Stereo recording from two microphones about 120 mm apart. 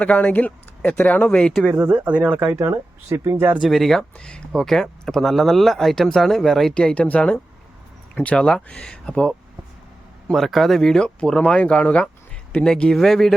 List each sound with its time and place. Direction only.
0.0 s speech: 10° left (ahead or behind)
1.9 s speech: 10° right (ahead or behind)
3.6 s speech: centre (ahead or behind)
10.3 s speech: centre (ahead or behind)